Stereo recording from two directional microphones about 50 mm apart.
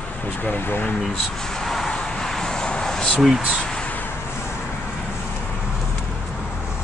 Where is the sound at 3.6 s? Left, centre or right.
Centre.